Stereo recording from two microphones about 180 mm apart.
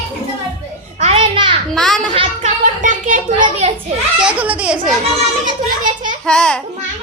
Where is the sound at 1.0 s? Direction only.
30° right (ahead or behind).